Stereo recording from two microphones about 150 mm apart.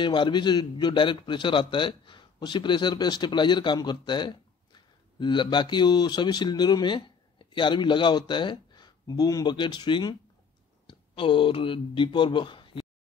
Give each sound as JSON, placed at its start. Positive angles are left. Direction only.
{"t": 0.0, "sound": "a man's voice", "side_deg": 30}